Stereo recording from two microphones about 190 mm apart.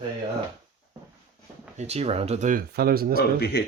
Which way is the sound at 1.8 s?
35° right (ahead or behind).